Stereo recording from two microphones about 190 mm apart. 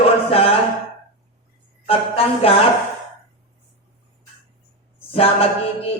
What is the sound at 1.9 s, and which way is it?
Speech, 30° left (ahead or behind).